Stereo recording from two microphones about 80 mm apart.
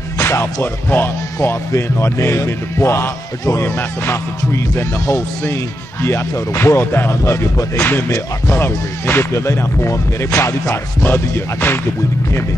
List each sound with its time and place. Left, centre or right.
0.2 s speech: left
6.0 s speech: left